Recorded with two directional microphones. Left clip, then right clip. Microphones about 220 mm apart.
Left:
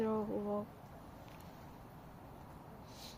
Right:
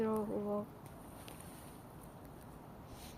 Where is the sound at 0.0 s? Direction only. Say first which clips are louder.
Even; 15° left (ahead or behind).